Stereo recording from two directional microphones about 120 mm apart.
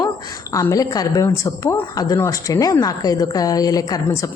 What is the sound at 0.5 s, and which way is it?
A woman's voice, 30° left (ahead or behind).